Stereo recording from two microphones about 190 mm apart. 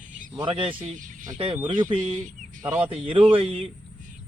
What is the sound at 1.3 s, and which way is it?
Speech, 25° right (ahead or behind).